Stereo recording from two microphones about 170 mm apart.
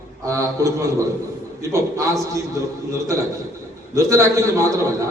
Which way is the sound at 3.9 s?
20° right (ahead or behind).